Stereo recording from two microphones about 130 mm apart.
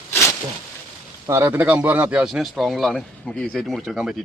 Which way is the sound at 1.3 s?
15° right (ahead or behind).